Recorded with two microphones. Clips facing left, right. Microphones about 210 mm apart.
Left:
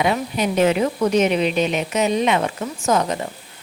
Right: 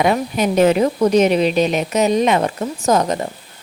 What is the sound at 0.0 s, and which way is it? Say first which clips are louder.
A woman's voice: right 4 dB; 45° right (ahead or behind).